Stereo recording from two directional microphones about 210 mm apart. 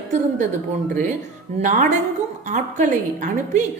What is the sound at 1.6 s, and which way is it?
A woman's voice, 35° right (ahead or behind).